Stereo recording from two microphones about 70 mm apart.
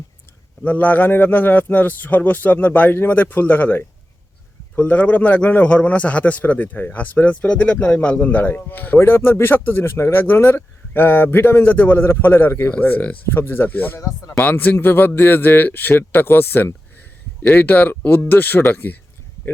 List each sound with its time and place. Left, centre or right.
0.6 s a man's voice: left